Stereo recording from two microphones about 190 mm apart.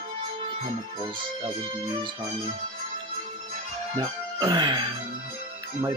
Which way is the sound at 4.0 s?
20° right (ahead or behind).